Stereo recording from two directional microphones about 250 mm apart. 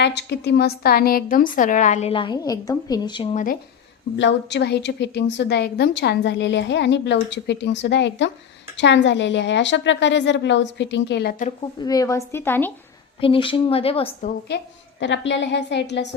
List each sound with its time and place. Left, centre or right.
0.0 s a woman's voice: left
4.2 s a woman's voice: left
11.8 s a woman's voice: centre
13.2 s speech: left
15.0 s a woman's voice: left